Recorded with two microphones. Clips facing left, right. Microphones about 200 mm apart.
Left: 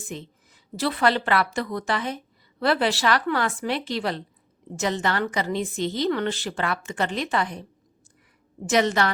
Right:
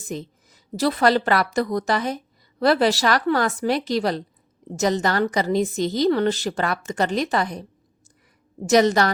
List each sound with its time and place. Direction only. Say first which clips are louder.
0.1 s a woman's voice: right 6 dB; 40° right (ahead or behind)
8.6 s a woman's voice: right 5 dB; 40° right (ahead or behind)